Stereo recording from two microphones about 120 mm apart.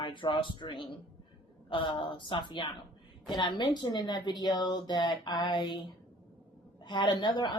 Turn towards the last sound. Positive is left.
turn(degrees=40)  # may be behind; listen again after turning